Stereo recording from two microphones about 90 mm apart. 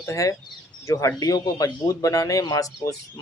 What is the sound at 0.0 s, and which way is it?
Speech, 35° left (ahead or behind).